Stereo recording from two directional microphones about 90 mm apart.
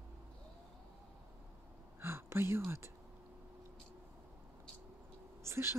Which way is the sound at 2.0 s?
25° right (ahead or behind).